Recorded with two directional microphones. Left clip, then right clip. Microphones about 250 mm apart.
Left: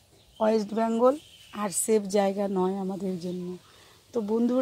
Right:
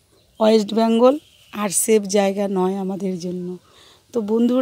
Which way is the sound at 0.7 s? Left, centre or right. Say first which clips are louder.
Right 8 dB; right.